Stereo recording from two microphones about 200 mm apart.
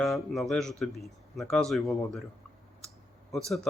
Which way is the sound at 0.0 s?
Centre (ahead or behind).